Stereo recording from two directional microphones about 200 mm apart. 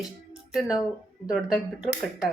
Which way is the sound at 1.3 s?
5° right (ahead or behind).